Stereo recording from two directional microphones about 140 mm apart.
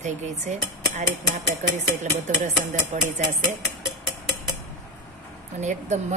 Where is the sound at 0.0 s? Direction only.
60° right (ahead or behind).